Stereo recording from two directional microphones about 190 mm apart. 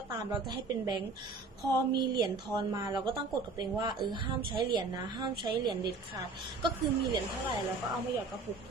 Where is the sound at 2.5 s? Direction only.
20° right (ahead or behind).